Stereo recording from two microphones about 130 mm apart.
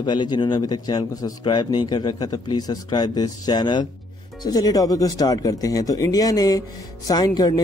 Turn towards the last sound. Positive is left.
turn(degrees=30)  # may be behind; listen again after turning